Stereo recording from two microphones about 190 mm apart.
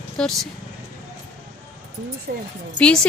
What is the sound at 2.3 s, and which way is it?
Speech, 55° right (ahead or behind).